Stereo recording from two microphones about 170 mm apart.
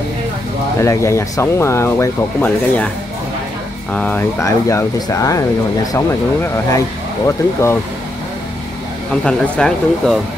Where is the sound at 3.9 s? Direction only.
10° left (ahead or behind).